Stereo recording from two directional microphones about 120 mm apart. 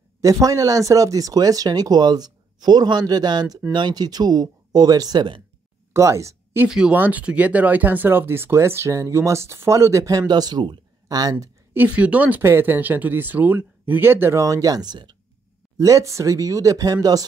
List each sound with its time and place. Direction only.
0.2 s speech: 30° right (ahead or behind)
5.9 s speech: 25° right (ahead or behind)
6.7 s speech: 5° right (ahead or behind); by 11.5 s 30° right (ahead or behind)
11.7 s speech: 15° right (ahead or behind); by 15.1 s 35° right (ahead or behind)
15.8 s speech: 25° right (ahead or behind)